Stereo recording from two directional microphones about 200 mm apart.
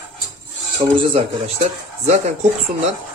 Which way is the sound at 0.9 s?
30° right (ahead or behind).